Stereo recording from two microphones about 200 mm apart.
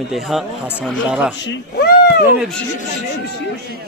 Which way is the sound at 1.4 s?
50° left (ahead or behind).